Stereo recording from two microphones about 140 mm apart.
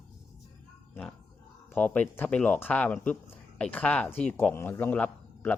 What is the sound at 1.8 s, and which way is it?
Speech, 10° left (ahead or behind).